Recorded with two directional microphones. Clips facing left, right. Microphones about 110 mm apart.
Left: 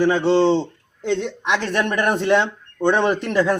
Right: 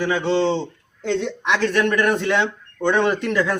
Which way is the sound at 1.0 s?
15° left (ahead or behind).